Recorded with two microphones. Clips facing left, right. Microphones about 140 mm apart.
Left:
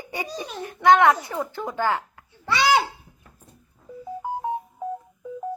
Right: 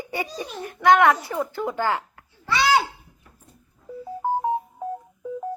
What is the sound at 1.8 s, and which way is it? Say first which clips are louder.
Speech: left 1 dB; 15° right (ahead or behind).